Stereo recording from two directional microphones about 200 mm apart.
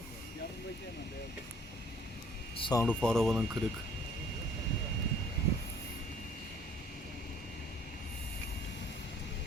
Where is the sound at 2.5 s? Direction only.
25° left (ahead or behind).